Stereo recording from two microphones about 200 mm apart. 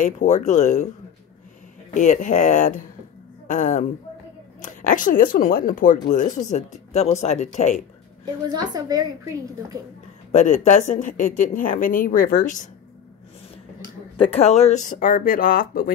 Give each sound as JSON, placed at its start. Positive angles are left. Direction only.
{"t": 0.0, "sound": "speech", "side_deg": 35}
{"t": 2.0, "sound": "speech", "side_deg": 40}
{"t": 8.5, "sound": "a woman's voice", "side_deg": -20}
{"t": 10.3, "sound": "speech", "side_deg": 35}
{"t": 14.1, "sound": "speech", "side_deg": 25}